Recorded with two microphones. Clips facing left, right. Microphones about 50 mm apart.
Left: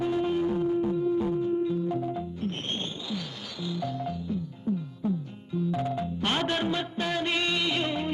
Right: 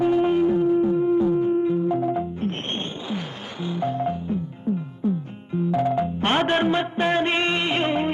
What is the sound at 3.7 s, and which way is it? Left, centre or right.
Music, right.